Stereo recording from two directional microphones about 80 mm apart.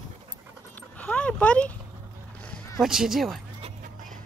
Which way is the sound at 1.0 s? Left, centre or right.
Centre.